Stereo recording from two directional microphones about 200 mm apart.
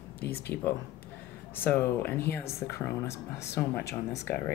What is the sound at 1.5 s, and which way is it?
Speech, 10° left (ahead or behind).